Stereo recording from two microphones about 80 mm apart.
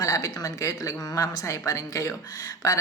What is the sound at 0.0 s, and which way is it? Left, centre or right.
Speech, left.